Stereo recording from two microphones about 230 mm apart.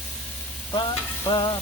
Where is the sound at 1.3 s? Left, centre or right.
Centre.